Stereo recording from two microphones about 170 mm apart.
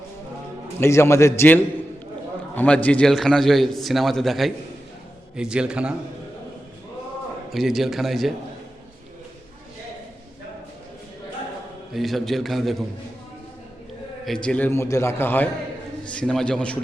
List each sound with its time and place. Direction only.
0.8 s a man's voice: 15° left (ahead or behind); by 5.9 s 5° right (ahead or behind)
7.5 s a man's voice: centre (ahead or behind)
11.9 s a man's voice: centre (ahead or behind)
14.3 s a man's voice: 5° left (ahead or behind)